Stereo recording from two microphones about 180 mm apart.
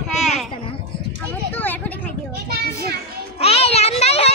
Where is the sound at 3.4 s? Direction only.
35° left (ahead or behind).